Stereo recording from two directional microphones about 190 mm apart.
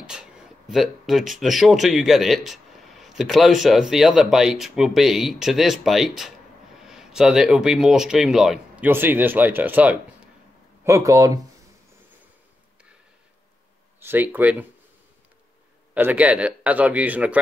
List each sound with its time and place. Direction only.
0.0 s speech: 5° right (ahead or behind)
14.0 s a man's voice: 10° right (ahead or behind)
15.9 s a man's voice: 10° right (ahead or behind)